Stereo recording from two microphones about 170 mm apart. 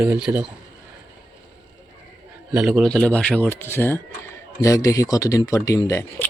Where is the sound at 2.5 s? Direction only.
5° right (ahead or behind).